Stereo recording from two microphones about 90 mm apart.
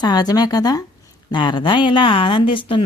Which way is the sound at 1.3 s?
60° left (ahead or behind).